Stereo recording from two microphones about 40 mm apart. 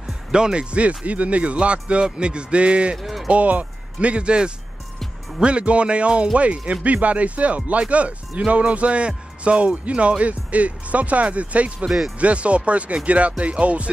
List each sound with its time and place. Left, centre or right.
0.3 s speech: right
3.0 s music: centre
3.3 s speech: right